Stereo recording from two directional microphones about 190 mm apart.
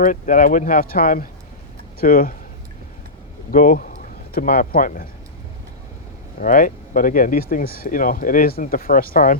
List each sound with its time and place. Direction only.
0.0 s speech: 45° left (ahead or behind)
3.5 s speech: 45° left (ahead or behind)
6.4 s speech: 45° left (ahead or behind)